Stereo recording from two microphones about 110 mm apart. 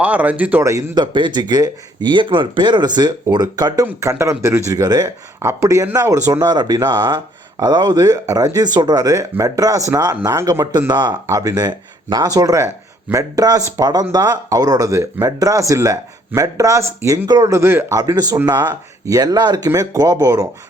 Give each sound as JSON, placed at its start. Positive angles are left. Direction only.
{"t": 0.0, "sound": "speech", "side_deg": -15}
{"t": 0.6, "sound": "speech", "side_deg": -30}
{"t": 1.1, "sound": "speech", "side_deg": -45}
{"t": 3.8, "sound": "speech", "side_deg": -25}
{"t": 18.0, "sound": "speech", "side_deg": -35}